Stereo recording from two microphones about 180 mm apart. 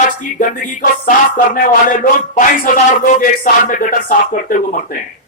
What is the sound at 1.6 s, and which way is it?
Speech, 50° left (ahead or behind).